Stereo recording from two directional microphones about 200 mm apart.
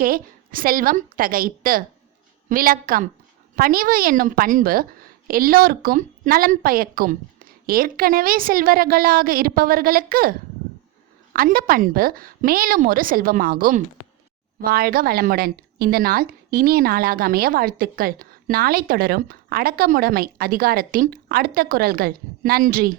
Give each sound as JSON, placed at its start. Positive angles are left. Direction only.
{"t": 0.0, "sound": "a woman's voice", "side_deg": -45}
{"t": 11.3, "sound": "a woman's voice", "side_deg": -45}